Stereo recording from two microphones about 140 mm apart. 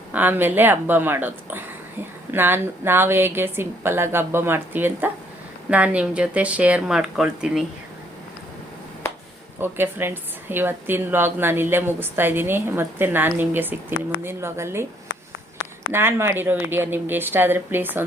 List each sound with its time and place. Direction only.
0.1 s a woman's voice: 15° right (ahead or behind)
9.6 s a woman's voice: 15° right (ahead or behind)
15.9 s a woman's voice: 15° right (ahead or behind)